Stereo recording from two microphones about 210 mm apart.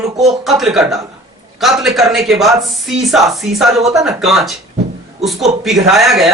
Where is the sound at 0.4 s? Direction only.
Centre (ahead or behind).